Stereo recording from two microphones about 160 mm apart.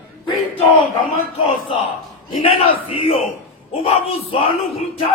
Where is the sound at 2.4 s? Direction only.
35° left (ahead or behind).